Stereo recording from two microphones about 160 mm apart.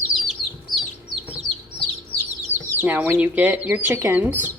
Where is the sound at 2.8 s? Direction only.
10° right (ahead or behind).